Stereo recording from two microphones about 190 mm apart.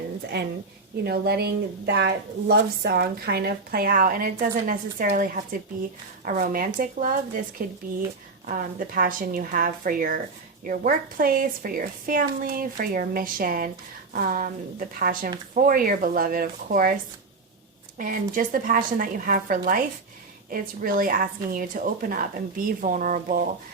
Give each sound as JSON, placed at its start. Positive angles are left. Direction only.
{"t": 0.3, "sound": "a woman's voice", "side_deg": -60}
{"t": 8.4, "sound": "speech", "side_deg": -45}
{"t": 17.9, "sound": "speech", "side_deg": -45}